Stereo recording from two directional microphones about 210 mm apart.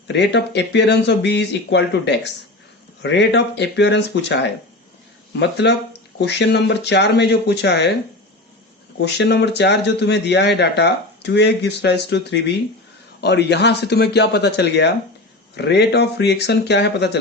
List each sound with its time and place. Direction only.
0.1 s speech: 55° left (ahead or behind)
5.4 s speech: 55° left (ahead or behind)
9.0 s speech: 55° left (ahead or behind)